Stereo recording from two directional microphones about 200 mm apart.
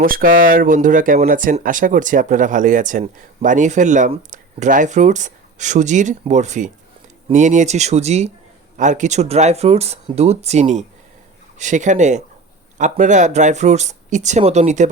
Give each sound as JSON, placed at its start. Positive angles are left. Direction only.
{"t": 0.0, "sound": "speech", "side_deg": -45}